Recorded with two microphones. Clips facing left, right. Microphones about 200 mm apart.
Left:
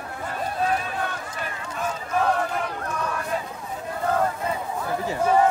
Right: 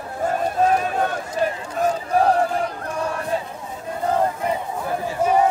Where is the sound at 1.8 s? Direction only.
40° right (ahead or behind).